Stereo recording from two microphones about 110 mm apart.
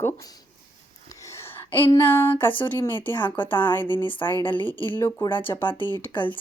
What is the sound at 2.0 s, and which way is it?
Speech, 20° left (ahead or behind).